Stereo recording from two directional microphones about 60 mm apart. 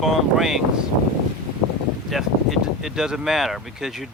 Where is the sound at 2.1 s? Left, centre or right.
Centre.